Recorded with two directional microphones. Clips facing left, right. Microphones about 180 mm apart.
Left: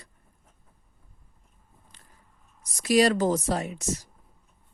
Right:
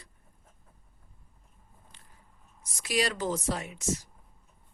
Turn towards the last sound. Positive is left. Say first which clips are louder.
# left 2 dB
turn(degrees=40)  # may be behind; listen again after turning